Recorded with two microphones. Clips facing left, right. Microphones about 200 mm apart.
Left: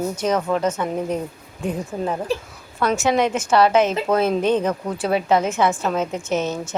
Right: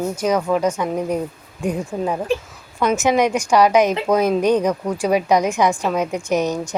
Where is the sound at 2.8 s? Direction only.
15° right (ahead or behind).